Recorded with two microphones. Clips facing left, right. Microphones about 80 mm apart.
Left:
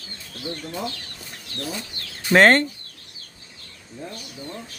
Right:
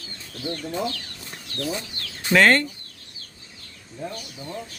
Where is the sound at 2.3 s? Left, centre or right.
Left.